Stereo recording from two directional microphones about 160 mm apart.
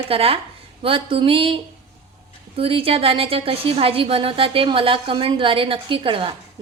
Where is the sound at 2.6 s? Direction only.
35° right (ahead or behind).